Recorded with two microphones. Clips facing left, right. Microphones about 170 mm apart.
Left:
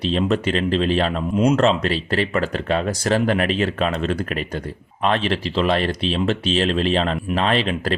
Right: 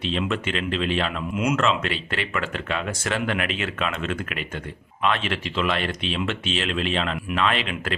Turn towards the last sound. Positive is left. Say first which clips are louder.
# left 5 dB
turn(degrees=35)  # may be behind; listen again after turning